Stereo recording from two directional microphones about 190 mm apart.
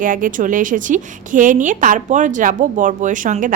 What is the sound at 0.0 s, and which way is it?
A woman's voice, 45° right (ahead or behind).